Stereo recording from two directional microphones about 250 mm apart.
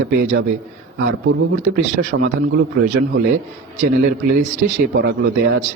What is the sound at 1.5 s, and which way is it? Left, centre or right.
Speech, right.